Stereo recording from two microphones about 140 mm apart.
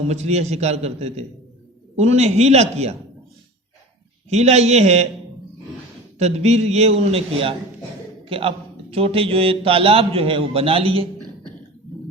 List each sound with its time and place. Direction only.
0.1 s a man's voice: 50° right (ahead or behind)
4.3 s a man's voice: 50° right (ahead or behind)
6.1 s a man's voice: 50° right (ahead or behind)